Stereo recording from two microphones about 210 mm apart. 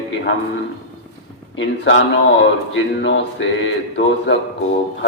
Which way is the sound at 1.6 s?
65° left (ahead or behind).